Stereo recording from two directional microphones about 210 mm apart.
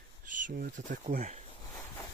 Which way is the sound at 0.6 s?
40° right (ahead or behind).